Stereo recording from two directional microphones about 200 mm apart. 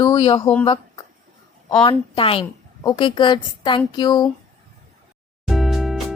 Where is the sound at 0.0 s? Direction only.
25° left (ahead or behind).